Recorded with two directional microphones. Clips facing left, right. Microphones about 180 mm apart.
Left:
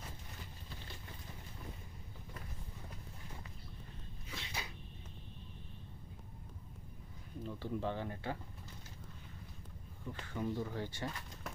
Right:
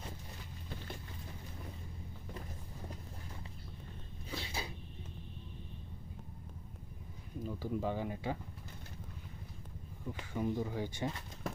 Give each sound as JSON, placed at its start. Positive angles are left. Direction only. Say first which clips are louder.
{"t": 4.3, "sound": "a sound", "louder": "right 5 dB", "side_deg": -35}
{"t": 7.4, "sound": "speech", "louder": "right 2 dB", "side_deg": -10}
{"t": 10.1, "sound": "speech", "louder": "right 3 dB", "side_deg": -15}